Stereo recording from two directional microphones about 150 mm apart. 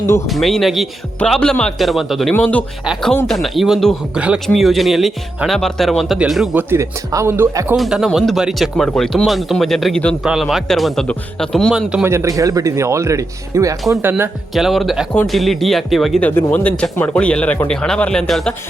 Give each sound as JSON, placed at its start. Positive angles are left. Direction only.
{"t": 0.3, "sound": "speech", "side_deg": 0}
{"t": 2.3, "sound": "speech", "side_deg": 10}
{"t": 2.8, "sound": "speech", "side_deg": -5}
{"t": 3.1, "sound": "speech", "side_deg": 5}
{"t": 6.6, "sound": "speech", "side_deg": -15}
{"t": 7.8, "sound": "speech", "side_deg": -5}
{"t": 12.0, "sound": "speech", "side_deg": -20}
{"t": 14.5, "sound": "speech", "side_deg": 0}